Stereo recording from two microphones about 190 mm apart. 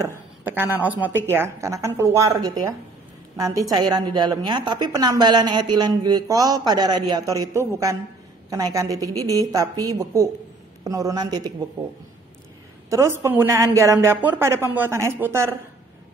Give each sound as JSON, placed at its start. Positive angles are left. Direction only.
{"t": 0.0, "sound": "a woman's voice", "side_deg": -10}
{"t": 12.9, "sound": "a woman's voice", "side_deg": -15}